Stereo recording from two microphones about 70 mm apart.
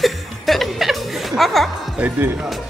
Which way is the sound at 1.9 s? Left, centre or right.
Right.